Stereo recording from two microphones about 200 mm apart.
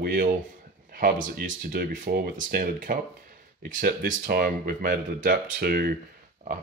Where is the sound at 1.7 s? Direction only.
45° right (ahead or behind).